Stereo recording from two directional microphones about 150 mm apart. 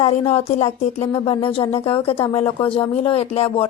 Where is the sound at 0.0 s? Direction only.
45° left (ahead or behind).